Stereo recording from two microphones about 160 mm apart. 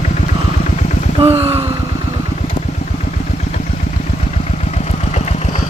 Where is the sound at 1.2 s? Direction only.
40° right (ahead or behind).